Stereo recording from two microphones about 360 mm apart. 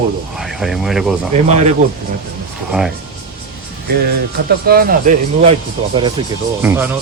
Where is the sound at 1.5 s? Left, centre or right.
Centre.